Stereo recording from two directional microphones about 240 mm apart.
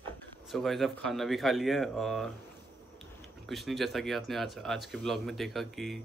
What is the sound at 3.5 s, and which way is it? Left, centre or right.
A man's voice, centre.